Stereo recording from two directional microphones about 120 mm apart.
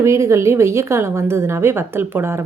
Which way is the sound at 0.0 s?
25° right (ahead or behind).